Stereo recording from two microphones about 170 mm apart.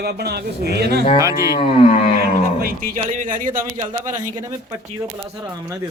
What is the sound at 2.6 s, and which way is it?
Speech, 55° right (ahead or behind).